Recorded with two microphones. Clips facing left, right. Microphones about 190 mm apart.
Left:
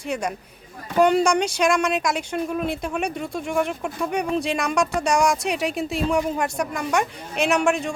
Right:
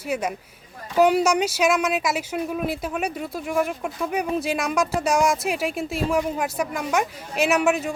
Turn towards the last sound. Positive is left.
turn(degrees=-5)  # may be behind; listen again after turning